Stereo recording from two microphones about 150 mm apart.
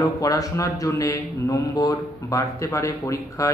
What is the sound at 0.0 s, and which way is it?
Speech, 25° left (ahead or behind).